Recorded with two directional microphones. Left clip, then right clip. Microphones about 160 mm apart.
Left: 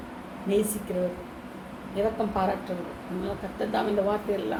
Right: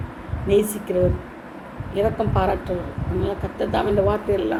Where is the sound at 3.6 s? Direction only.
45° right (ahead or behind).